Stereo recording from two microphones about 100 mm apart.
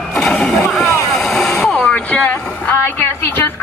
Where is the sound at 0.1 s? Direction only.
5° left (ahead or behind).